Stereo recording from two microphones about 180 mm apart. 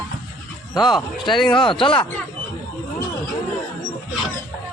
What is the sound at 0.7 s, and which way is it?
Speech, 25° left (ahead or behind).